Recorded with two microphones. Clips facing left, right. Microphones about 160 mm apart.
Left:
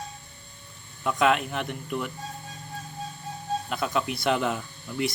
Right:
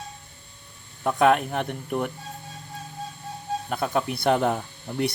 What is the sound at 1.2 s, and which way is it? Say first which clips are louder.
Speech: right 4 dB; 50° right (ahead or behind).